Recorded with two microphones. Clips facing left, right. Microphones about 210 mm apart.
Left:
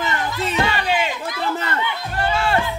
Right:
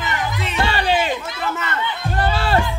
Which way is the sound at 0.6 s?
30° right (ahead or behind).